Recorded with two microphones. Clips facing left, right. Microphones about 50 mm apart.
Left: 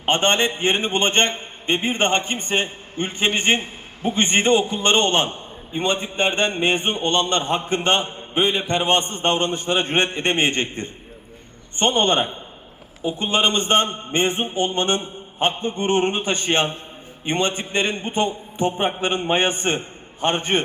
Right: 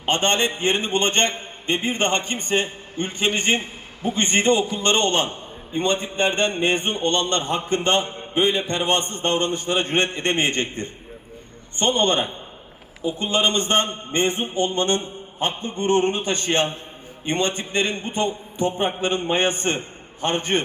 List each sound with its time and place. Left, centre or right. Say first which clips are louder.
0.0 s a man's voice: left 2 dB; left